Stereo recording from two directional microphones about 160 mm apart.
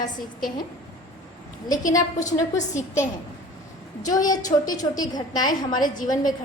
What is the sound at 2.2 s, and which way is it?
Speech, 50° left (ahead or behind).